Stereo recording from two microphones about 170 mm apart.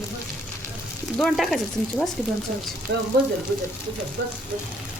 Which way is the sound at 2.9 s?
80° right.